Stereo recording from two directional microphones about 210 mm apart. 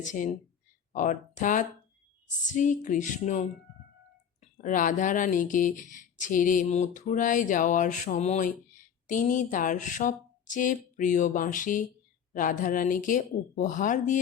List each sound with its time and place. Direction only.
0.0 s speech: 35° left (ahead or behind)